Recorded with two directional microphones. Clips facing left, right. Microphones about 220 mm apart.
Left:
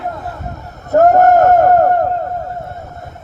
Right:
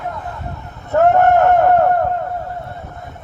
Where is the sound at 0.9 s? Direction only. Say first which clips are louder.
Left 3 dB; 40° left (ahead or behind).